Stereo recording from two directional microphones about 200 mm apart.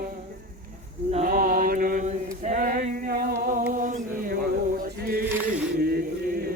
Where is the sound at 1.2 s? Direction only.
45° right (ahead or behind).